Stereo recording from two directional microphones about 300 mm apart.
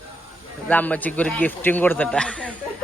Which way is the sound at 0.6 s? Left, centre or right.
Centre.